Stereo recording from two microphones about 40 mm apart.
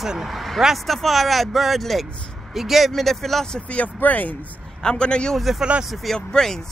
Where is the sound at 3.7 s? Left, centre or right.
Left.